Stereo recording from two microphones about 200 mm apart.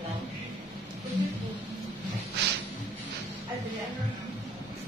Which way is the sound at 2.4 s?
55° right (ahead or behind).